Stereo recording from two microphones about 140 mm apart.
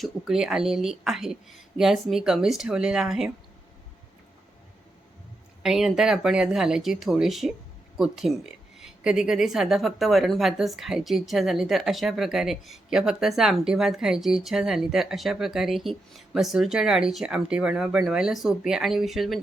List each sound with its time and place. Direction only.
0.0 s a woman's voice: 5° right (ahead or behind)
5.6 s a woman's voice: 5° right (ahead or behind)